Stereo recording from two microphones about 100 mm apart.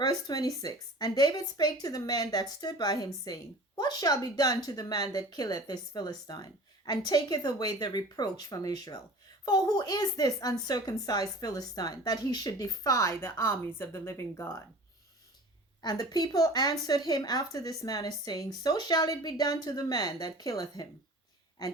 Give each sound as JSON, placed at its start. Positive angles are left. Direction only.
{"t": 0.0, "sound": "a woman's voice", "side_deg": 40}
{"t": 15.8, "sound": "a woman's voice", "side_deg": 45}